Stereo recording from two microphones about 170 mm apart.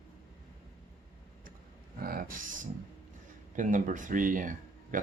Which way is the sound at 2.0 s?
55° right (ahead or behind).